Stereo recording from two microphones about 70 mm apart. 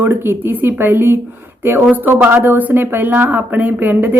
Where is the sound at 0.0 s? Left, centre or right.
Right.